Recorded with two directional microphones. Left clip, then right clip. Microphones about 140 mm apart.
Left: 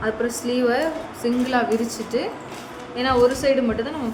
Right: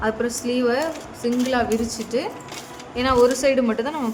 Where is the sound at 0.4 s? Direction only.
5° right (ahead or behind).